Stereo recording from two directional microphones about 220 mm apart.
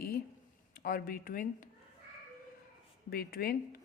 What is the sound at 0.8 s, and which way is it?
Music, 40° left (ahead or behind).